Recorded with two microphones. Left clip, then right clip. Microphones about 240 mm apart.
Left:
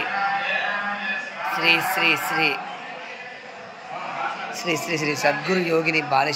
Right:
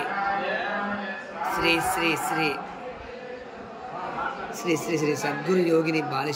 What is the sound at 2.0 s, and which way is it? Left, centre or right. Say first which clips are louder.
Speech: left 5 dB; centre.